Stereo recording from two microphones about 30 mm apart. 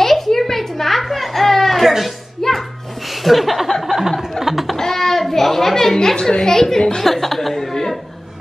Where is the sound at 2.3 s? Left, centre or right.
Centre.